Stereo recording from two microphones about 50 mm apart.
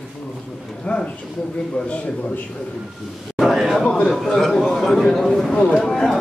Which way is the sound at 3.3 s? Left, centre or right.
Centre.